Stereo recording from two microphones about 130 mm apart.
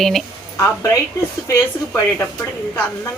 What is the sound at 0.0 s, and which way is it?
Speech, centre (ahead or behind).